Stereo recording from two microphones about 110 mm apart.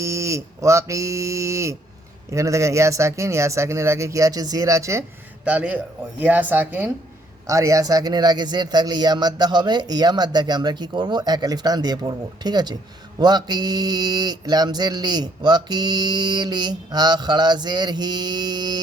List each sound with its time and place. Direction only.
0.0 s a sound: 25° right (ahead or behind)
2.3 s speech: 30° right (ahead or behind)
5.5 s speech: 15° right (ahead or behind)
7.4 s speech: 30° right (ahead or behind)